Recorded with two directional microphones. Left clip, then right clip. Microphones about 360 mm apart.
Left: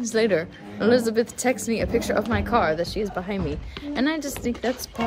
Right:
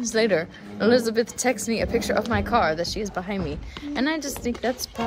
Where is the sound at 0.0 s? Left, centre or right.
Centre.